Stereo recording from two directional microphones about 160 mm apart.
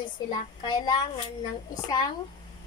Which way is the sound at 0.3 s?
30° left (ahead or behind).